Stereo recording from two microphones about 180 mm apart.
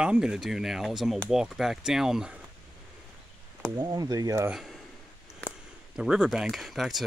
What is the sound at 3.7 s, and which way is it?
Speech, 20° right (ahead or behind).